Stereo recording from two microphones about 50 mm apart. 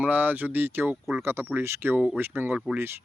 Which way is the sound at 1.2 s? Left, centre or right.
Right.